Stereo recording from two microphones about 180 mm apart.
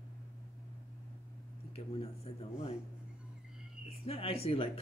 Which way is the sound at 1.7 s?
30° left (ahead or behind).